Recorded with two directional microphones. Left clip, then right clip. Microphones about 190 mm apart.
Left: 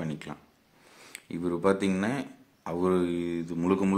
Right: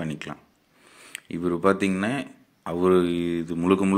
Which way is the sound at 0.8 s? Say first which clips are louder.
Right 3 dB; centre (ahead or behind).